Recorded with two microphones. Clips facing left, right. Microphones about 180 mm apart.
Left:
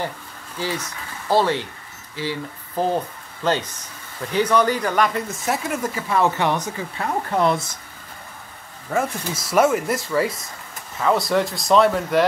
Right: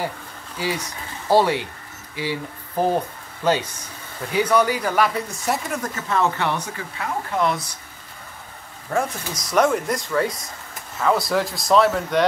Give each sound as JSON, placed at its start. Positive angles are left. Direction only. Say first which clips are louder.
{"t": 0.6, "sound": "speech", "louder": "right 1 dB", "side_deg": -15}
{"t": 6.6, "sound": "speech", "louder": "left 3 dB", "side_deg": 35}
{"t": 8.9, "sound": "speech", "louder": "left 1 dB", "side_deg": 5}